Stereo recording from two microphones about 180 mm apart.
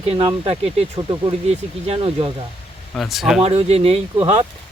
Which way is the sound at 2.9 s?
Centre (ahead or behind).